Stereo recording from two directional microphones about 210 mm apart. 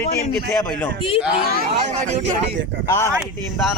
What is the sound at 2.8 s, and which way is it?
Speech, 15° left (ahead or behind).